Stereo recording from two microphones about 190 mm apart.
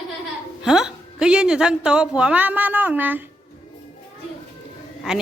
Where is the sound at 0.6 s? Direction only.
5° right (ahead or behind).